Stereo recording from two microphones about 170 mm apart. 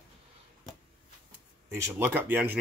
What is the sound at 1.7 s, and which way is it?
Speech, 10° right (ahead or behind).